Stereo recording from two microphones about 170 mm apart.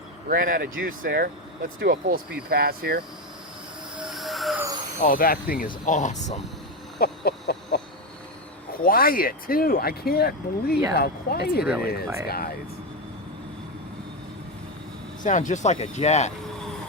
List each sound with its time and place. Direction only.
0.3 s speech: 55° right (ahead or behind)
4.0 s a sound: centre (ahead or behind)
4.9 s speech: 55° left (ahead or behind)
5.8 s speech: 45° left (ahead or behind)
7.0 s a sound: 70° left (ahead or behind)
8.8 s speech: 60° left (ahead or behind)
15.2 s speech: 45° left (ahead or behind)